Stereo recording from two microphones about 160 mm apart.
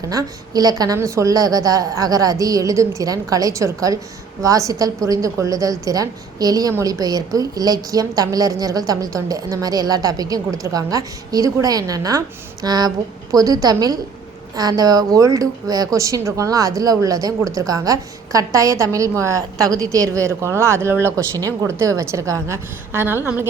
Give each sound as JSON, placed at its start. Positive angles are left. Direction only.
{"t": 0.1, "sound": "speech", "side_deg": -20}